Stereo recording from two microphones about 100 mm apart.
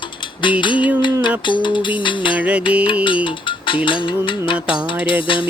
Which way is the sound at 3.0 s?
55° left (ahead or behind).